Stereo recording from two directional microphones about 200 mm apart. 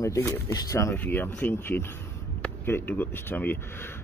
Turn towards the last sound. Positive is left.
turn(degrees=10)  # may be behind; listen again after turning